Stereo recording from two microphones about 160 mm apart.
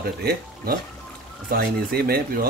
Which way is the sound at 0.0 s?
75° right (ahead or behind).